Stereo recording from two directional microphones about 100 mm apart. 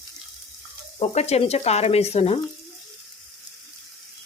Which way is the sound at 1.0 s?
90° left.